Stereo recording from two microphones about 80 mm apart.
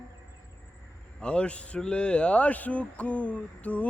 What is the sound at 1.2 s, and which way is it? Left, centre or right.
A man's voice, centre.